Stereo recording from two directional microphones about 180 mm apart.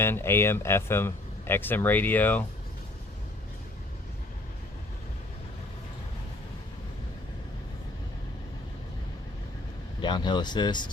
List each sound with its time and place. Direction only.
0.0 s speech: 15° left (ahead or behind)
10.0 s speech: 25° left (ahead or behind)